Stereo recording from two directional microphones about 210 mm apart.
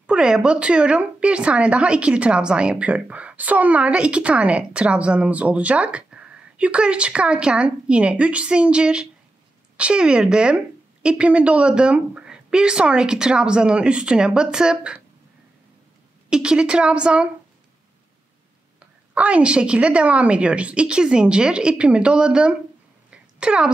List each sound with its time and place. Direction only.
0.0 s a woman's voice: 5° right (ahead or behind)
16.3 s a woman's voice: 5° right (ahead or behind)
18.8 s a woman's voice: 5° right (ahead or behind)
23.0 s a sound: 5° right (ahead or behind)